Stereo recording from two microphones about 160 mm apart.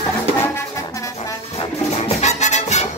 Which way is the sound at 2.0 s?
45° left (ahead or behind).